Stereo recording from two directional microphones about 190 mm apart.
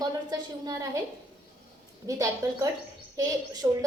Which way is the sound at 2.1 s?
15° right (ahead or behind).